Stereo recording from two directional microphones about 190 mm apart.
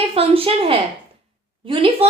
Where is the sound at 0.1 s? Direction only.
30° right (ahead or behind).